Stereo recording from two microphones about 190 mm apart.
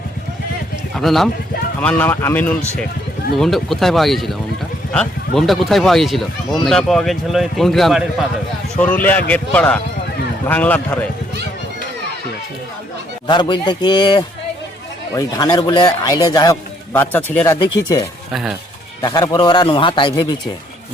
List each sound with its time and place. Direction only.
0.9 s speech: centre (ahead or behind)
13.2 s speech: 25° left (ahead or behind)
18.3 s speech: 5° right (ahead or behind)
19.0 s speech: 25° left (ahead or behind)